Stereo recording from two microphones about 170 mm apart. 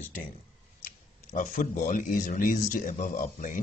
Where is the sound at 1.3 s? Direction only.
50° left (ahead or behind).